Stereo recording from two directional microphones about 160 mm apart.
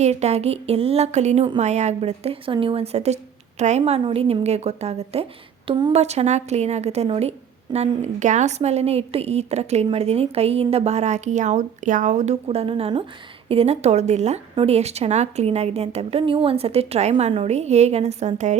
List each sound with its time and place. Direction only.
0.0 s a woman's voice: 45° right (ahead or behind)
5.6 s speech: 30° right (ahead or behind)
5.9 s a woman's voice: 40° right (ahead or behind)